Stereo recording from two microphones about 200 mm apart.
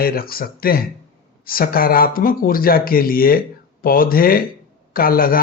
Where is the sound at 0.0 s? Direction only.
50° left (ahead or behind).